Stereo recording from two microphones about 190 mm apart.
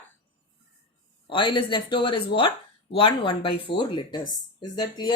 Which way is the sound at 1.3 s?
25° left (ahead or behind).